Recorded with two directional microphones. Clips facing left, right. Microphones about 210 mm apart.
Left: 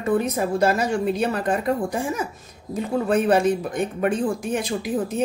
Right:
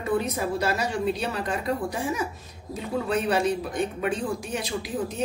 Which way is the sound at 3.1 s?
50° left (ahead or behind).